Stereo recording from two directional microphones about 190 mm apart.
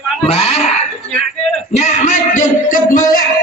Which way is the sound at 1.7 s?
40° left (ahead or behind).